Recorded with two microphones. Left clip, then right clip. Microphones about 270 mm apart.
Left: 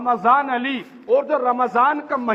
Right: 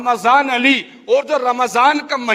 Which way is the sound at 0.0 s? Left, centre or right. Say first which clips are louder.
Right 3 dB; right.